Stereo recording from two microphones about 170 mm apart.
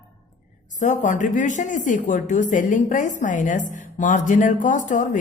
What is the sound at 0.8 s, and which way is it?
A woman's voice, 45° left (ahead or behind).